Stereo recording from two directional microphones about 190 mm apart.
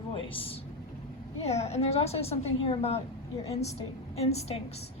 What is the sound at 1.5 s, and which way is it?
A woman's voice, 35° left (ahead or behind).